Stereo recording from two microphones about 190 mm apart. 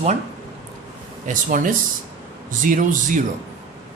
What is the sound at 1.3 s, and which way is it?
Speech, 45° right (ahead or behind).